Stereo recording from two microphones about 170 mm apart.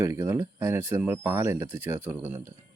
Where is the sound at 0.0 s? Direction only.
15° right (ahead or behind).